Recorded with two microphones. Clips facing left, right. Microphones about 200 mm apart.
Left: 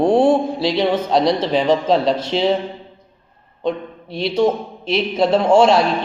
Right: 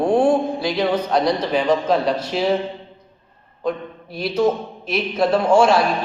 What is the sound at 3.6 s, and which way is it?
A man's voice, 25° left (ahead or behind).